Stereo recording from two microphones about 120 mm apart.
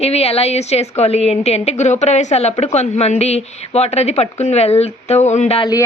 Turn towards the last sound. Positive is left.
turn(degrees=65)  # may be behind; listen again after turning